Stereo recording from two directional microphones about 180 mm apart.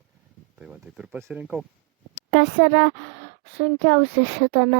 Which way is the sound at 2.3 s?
45° right (ahead or behind).